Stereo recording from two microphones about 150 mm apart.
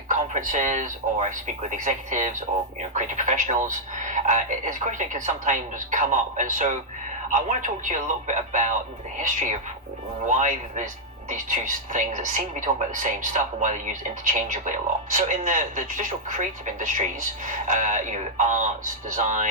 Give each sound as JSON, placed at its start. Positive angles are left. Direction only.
{"t": 0.1, "sound": "a man's voice", "side_deg": -55}